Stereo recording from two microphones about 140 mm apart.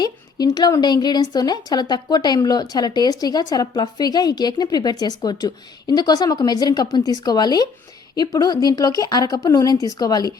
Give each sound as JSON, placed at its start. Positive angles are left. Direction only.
{"t": 0.0, "sound": "a woman's voice", "side_deg": 30}